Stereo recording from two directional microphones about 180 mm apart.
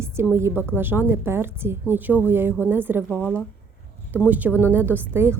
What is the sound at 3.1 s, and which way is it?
Speech, 10° left (ahead or behind).